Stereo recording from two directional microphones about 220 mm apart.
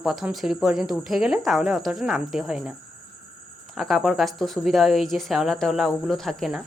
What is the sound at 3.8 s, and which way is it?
Speech, centre (ahead or behind).